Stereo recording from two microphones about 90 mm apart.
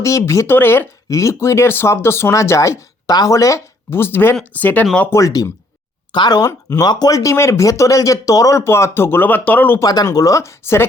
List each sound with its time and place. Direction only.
0.0 s speech: 35° left (ahead or behind)
1.0 s speech: 35° left (ahead or behind); by 4.9 s 20° left (ahead or behind)
5.1 s speech: 40° left (ahead or behind)
6.1 s speech: 55° left (ahead or behind)
6.4 s speech: 35° left (ahead or behind)
9.8 s speech: 45° left (ahead or behind); by 10.8 s 30° left (ahead or behind)